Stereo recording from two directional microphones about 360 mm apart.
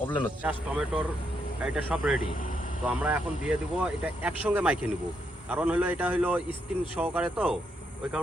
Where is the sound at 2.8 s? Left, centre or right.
Centre.